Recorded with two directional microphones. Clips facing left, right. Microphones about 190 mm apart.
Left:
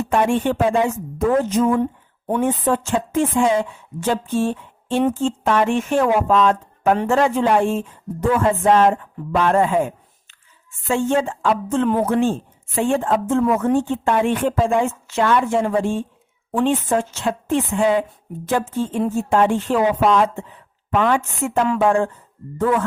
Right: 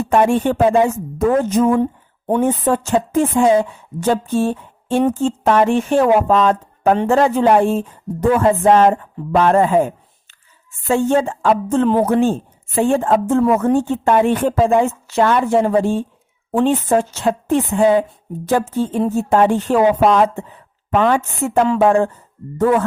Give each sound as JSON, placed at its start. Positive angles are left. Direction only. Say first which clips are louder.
{"t": 0.0, "sound": "a woman's voice", "louder": "right 4 dB", "side_deg": -40}
{"t": 1.8, "sound": "a woman's voice", "louder": "right 3 dB", "side_deg": -30}